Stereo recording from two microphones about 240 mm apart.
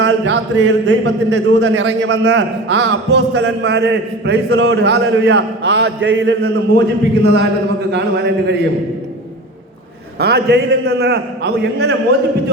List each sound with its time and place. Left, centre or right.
0.0 s a man's voice: right
10.2 s a man's voice: right